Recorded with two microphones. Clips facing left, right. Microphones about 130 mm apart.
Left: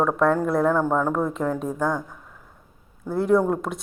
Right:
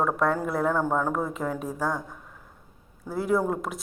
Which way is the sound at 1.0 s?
45° left (ahead or behind).